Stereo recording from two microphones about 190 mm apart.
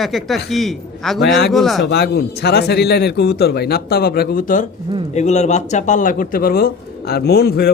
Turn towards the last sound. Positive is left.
turn(degrees=55)  # may be behind; listen again after turning